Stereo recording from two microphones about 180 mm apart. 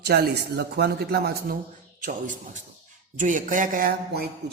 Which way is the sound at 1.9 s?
45° right (ahead or behind).